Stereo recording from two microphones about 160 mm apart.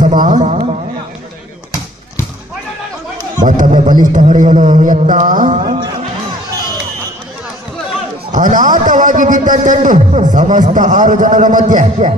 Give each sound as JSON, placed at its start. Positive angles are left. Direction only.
{"t": 0.0, "sound": "carnatic music", "side_deg": -55}
{"t": 3.3, "sound": "a man's voice", "side_deg": -50}
{"t": 5.6, "sound": "speech", "side_deg": -30}
{"t": 8.3, "sound": "a man's voice", "side_deg": -50}